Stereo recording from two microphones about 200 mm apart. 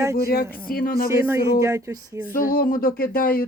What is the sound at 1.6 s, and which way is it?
Speech, 15° right (ahead or behind).